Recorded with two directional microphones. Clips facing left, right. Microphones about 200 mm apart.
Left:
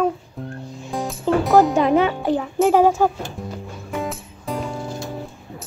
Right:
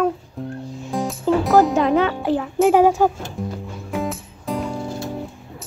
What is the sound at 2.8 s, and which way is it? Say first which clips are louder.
Speech: even; 10° right (ahead or behind).